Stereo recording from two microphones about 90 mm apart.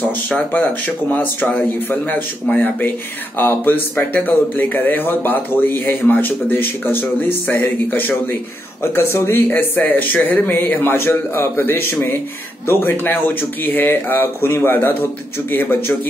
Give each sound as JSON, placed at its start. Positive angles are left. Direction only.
{"t": 0.0, "sound": "speech", "side_deg": 15}